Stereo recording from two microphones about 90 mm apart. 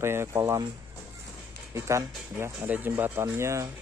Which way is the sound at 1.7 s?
35° right (ahead or behind).